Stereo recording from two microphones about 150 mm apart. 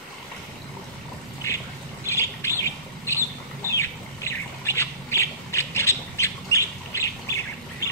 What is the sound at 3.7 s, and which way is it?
Squawk, 20° left (ahead or behind).